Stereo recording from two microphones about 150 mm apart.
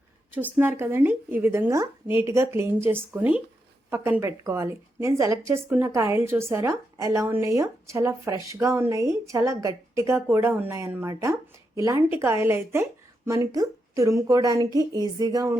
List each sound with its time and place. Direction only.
0.6 s a woman's voice: 15° right (ahead or behind)